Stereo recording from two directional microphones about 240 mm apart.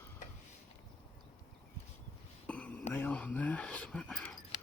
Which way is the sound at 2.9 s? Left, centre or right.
Centre.